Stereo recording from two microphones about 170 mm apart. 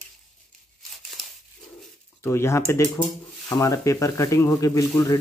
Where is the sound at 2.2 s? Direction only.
15° left (ahead or behind).